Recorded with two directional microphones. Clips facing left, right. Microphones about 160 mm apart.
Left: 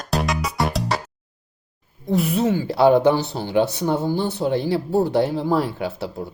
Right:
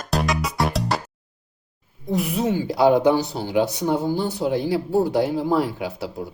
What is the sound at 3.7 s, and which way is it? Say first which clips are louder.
Speech: even; 15° right (ahead or behind).